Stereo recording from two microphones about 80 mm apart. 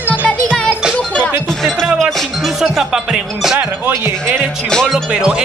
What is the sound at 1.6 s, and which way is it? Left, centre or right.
Music, centre.